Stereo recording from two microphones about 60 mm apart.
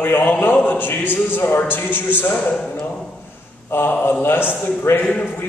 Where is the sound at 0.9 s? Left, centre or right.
Left.